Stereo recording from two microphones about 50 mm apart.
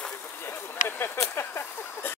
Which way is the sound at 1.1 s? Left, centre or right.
Left.